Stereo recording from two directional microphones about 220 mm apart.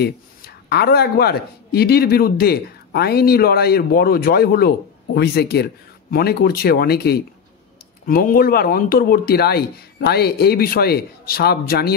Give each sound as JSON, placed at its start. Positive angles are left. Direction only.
{"t": 0.7, "sound": "a man's voice", "side_deg": 45}